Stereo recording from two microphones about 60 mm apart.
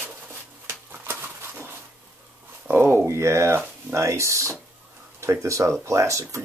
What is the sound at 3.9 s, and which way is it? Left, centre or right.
Speech, right.